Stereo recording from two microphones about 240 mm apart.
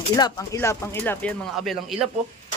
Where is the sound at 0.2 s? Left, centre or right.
Centre.